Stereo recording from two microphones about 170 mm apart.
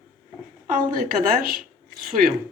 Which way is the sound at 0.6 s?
50° right (ahead or behind).